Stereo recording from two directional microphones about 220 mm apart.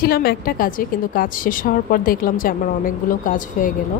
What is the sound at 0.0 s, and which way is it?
A woman's voice, 45° left (ahead or behind).